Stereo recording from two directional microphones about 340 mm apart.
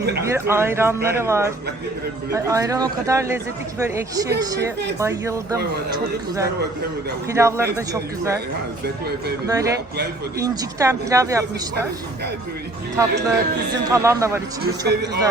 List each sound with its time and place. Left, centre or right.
0.2 s a man's voice: centre
9.5 s a man's voice: centre
13.9 s a man's voice: centre
14.6 s a man's voice: right